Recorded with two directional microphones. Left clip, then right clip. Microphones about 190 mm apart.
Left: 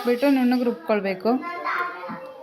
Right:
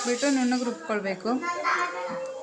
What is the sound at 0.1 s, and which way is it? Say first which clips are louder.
Speech: left 6 dB; 40° left (ahead or behind).